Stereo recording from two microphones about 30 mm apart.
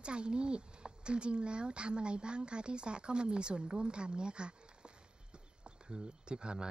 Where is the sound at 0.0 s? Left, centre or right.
Right.